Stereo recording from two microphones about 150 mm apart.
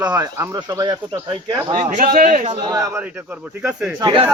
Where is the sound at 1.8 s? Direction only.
50° right (ahead or behind).